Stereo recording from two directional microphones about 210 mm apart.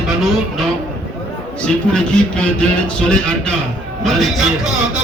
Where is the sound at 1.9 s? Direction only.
5° left (ahead or behind).